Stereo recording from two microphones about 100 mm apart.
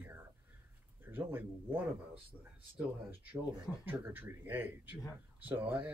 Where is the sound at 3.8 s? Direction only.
20° right (ahead or behind).